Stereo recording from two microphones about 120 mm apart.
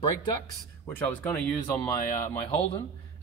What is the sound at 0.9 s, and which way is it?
Speech, 15° left (ahead or behind).